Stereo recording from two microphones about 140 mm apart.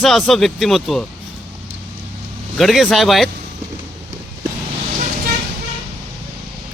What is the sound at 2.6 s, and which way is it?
Speech, centre (ahead or behind).